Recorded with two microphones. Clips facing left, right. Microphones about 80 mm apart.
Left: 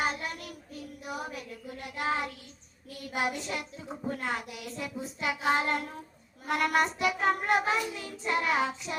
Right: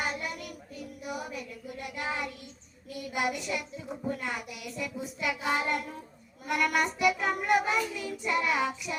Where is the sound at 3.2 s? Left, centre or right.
Left.